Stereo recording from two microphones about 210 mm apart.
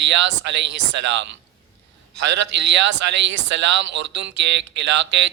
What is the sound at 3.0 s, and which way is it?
Speech, 55° right (ahead or behind).